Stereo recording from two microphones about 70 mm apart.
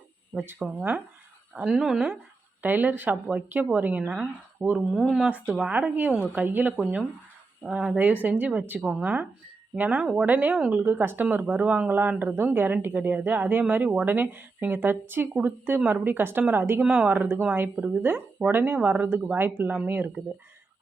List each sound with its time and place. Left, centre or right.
0.3 s speech: centre
1.5 s speech: centre
2.6 s speech: right
4.6 s speech: left
5.7 s speech: right
7.9 s speech: right
16.8 s speech: centre